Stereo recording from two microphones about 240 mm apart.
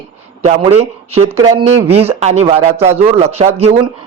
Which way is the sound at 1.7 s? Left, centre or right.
Right.